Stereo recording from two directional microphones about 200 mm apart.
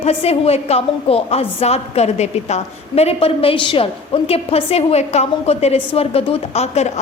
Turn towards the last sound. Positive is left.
turn(degrees=35)  # may be behind; listen again after turning